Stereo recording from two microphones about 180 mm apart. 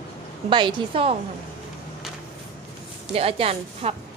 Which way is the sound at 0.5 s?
30° right (ahead or behind).